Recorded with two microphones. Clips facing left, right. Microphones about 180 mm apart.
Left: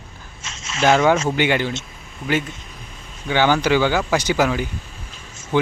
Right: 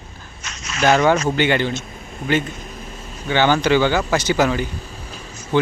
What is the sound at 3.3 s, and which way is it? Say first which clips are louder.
Speech: right 1 dB; 10° left (ahead or behind).